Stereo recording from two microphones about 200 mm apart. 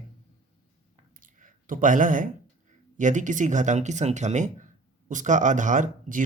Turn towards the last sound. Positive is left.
turn(degrees=-40)  # may be behind; listen again after turning